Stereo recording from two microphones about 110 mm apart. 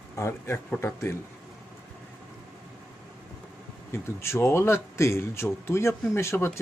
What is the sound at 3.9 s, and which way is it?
A man's voice, 20° left (ahead or behind).